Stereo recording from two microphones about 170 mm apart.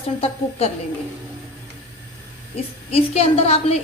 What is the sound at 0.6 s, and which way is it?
Speech, 35° left (ahead or behind).